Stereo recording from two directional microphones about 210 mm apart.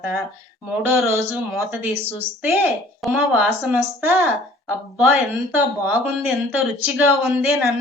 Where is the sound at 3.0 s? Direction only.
Centre (ahead or behind).